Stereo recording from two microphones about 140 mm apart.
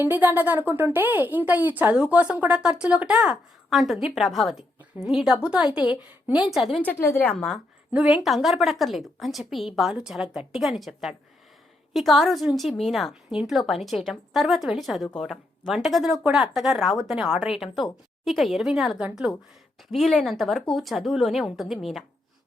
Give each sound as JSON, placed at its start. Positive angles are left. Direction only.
{"t": 0.0, "sound": "a woman's voice", "side_deg": -15}
{"t": 6.8, "sound": "a woman's voice", "side_deg": 15}
{"t": 7.3, "sound": "a woman's voice", "side_deg": 5}
{"t": 7.9, "sound": "a woman's voice", "side_deg": -10}